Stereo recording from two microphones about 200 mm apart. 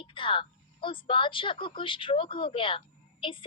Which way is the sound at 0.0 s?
25° left (ahead or behind).